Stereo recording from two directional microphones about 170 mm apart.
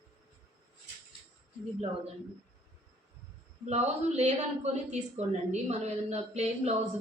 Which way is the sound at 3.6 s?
40° right (ahead or behind).